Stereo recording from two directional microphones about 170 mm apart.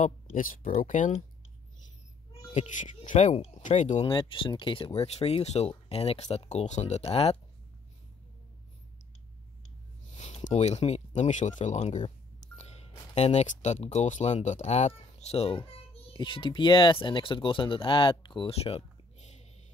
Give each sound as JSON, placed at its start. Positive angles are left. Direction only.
{"t": 0.0, "sound": "speech", "side_deg": 50}
{"t": 2.5, "sound": "speech", "side_deg": 45}
{"t": 4.0, "sound": "speech", "side_deg": 25}
{"t": 10.1, "sound": "speech", "side_deg": 40}